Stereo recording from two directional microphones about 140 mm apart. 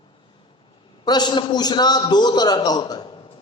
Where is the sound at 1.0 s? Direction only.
30° left (ahead or behind).